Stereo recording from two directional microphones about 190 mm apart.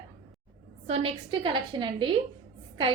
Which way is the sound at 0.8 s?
30° right (ahead or behind).